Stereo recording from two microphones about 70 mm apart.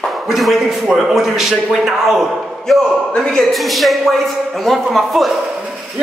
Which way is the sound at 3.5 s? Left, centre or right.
Centre.